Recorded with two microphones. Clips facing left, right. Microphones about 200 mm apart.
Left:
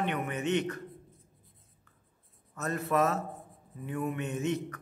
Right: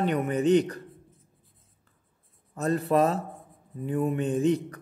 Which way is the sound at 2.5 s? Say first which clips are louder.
Right 6 dB; 30° right (ahead or behind).